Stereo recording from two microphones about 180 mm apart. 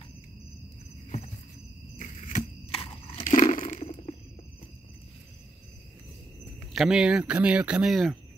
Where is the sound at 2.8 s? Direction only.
30° left (ahead or behind).